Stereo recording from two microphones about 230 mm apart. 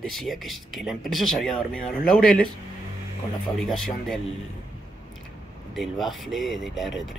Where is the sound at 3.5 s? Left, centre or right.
Centre.